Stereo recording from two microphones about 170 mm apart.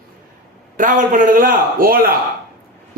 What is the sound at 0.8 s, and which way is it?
A man's voice, 50° right (ahead or behind).